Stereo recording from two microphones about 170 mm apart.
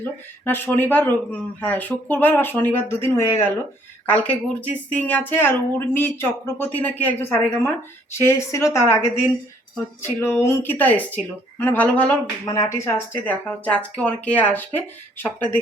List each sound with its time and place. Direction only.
0.0 s a woman's voice: 10° left (ahead or behind)
10.2 s a woman's voice: 15° left (ahead or behind)
12.5 s a woman's voice: 15° left (ahead or behind)